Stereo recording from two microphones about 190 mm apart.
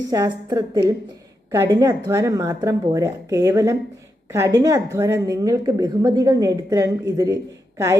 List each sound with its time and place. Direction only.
0.1 s a woman's voice: 20° right (ahead or behind)